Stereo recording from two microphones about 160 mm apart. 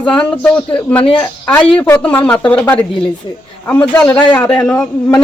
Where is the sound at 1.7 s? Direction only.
10° left (ahead or behind).